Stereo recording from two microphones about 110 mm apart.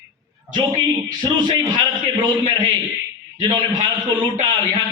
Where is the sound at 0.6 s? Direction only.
40° right (ahead or behind).